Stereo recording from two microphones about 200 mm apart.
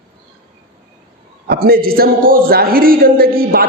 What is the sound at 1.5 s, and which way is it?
A man's voice, 50° right (ahead or behind).